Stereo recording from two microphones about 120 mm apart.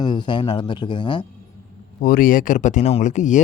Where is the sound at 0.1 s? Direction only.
40° left (ahead or behind).